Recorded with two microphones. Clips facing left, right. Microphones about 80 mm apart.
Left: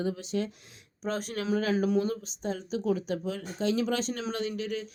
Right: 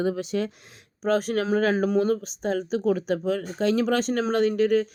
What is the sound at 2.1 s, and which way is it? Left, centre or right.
Speech, right.